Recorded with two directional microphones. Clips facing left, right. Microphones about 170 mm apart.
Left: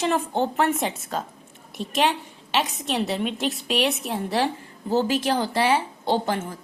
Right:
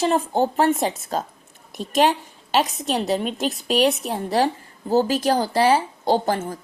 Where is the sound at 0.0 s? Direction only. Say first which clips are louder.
Right 3 dB; 35° right (ahead or behind).